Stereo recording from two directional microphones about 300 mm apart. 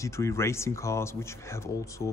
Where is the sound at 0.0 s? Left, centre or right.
Centre.